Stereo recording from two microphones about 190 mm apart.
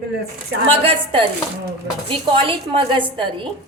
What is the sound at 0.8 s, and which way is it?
A woman's voice, 30° right (ahead or behind).